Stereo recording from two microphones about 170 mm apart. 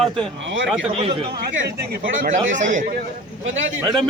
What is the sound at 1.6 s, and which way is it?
Speech, 90° right.